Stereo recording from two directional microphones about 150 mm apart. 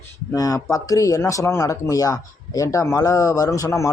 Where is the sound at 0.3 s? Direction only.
25° left (ahead or behind).